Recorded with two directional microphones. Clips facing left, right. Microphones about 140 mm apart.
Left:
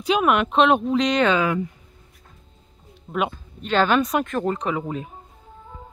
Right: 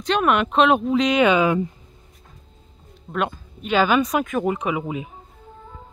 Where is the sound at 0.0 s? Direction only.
5° left (ahead or behind); by 1.6 s 15° right (ahead or behind).